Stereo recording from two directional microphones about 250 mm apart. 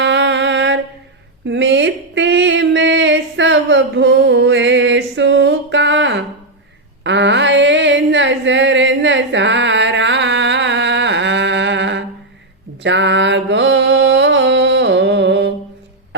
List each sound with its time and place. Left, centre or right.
0.0 s mantra: right
1.5 s a sound: right
12.8 s mantra: right